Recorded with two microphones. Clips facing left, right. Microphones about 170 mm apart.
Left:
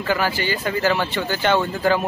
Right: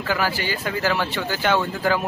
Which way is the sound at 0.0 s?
5° right (ahead or behind).